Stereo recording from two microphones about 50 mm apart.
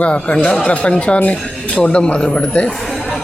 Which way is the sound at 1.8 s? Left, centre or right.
Left.